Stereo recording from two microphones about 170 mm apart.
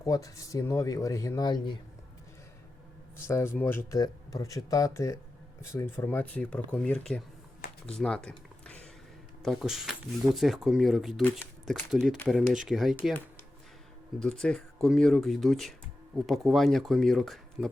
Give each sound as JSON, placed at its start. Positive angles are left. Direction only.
{"t": 0.0, "sound": "speech", "side_deg": 20}
{"t": 3.2, "sound": "speech", "side_deg": 15}
{"t": 14.2, "sound": "speech", "side_deg": 5}